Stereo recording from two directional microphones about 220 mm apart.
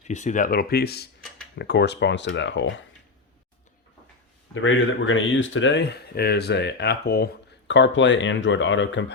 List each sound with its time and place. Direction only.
0.1 s speech: 35° left (ahead or behind); by 2.8 s 55° left (ahead or behind)
4.5 s speech: 60° left (ahead or behind); by 7.3 s 45° left (ahead or behind)
7.7 s speech: 55° left (ahead or behind)